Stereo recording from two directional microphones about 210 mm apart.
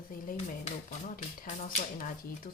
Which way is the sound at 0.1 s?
40° left (ahead or behind).